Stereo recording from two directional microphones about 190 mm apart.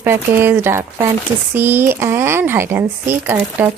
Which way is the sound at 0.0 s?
10° right (ahead or behind).